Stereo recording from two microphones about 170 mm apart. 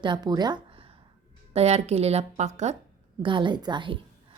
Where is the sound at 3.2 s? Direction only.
30° right (ahead or behind).